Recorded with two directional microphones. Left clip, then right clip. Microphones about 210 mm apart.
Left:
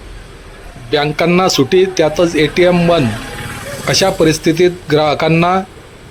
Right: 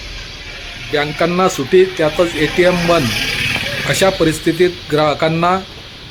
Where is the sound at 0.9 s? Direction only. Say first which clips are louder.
Left 3 dB; 20° left (ahead or behind).